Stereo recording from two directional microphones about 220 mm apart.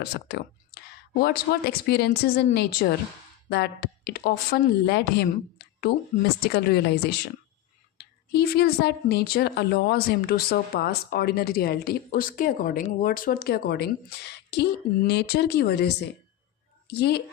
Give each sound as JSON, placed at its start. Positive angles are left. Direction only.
{"t": 0.0, "sound": "a woman's voice", "side_deg": 45}